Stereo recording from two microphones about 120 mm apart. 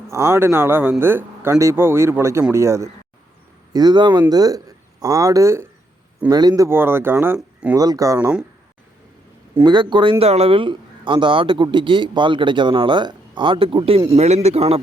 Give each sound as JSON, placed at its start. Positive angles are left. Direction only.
{"t": 0.1, "sound": "speech", "side_deg": -20}
{"t": 3.7, "sound": "speech", "side_deg": -35}
{"t": 6.2, "sound": "speech", "side_deg": -35}
{"t": 6.7, "sound": "speech", "side_deg": -20}
{"t": 7.8, "sound": "speech", "side_deg": -30}
{"t": 9.6, "sound": "speech", "side_deg": -40}
{"t": 14.2, "sound": "speech", "side_deg": -65}